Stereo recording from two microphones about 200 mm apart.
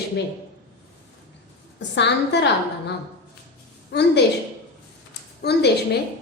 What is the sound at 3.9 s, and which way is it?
Speech, 55° left (ahead or behind).